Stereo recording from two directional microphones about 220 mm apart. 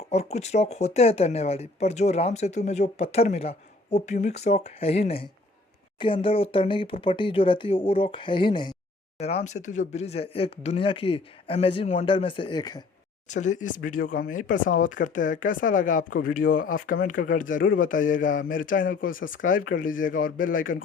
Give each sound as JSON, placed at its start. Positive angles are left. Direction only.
{"t": 0.1, "sound": "speech", "side_deg": 30}
{"t": 13.2, "sound": "speech", "side_deg": 35}